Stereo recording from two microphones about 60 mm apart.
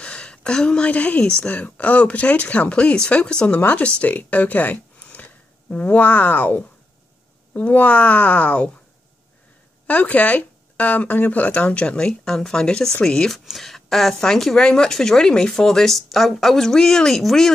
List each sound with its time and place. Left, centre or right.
0.0 s a woman's voice: centre
9.8 s speech: left; by 17.5 s centre